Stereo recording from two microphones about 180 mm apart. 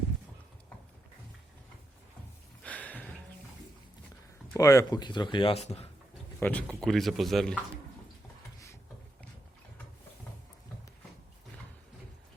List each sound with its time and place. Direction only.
2.6 s a sound: 10° left (ahead or behind)
4.5 s speech: 20° left (ahead or behind); by 5.9 s 35° left (ahead or behind)
6.4 s speech: 5° left (ahead or behind)